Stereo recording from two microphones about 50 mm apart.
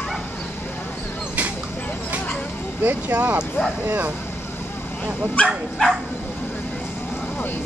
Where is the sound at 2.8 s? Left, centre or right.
Right.